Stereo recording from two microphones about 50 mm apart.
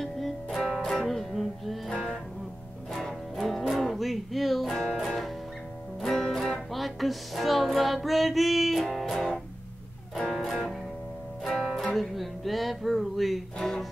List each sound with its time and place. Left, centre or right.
0.0 s music: centre
1.9 s music: centre